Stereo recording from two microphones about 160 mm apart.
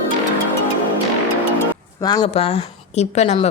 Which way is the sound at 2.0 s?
25° left (ahead or behind).